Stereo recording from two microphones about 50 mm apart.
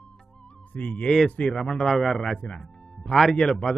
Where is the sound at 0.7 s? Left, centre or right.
Left.